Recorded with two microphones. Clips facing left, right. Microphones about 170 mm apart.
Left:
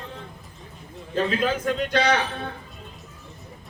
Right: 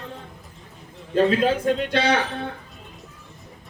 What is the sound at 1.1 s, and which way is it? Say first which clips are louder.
Speech: right 5 dB; 30° right (ahead or behind).